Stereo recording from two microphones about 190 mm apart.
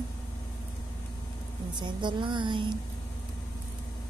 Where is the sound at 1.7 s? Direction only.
25° right (ahead or behind).